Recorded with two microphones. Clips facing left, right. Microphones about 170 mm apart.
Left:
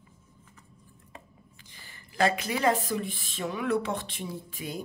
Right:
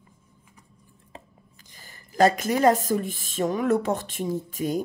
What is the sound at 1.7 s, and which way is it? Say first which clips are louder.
Speech: right 10 dB; 40° right (ahead or behind).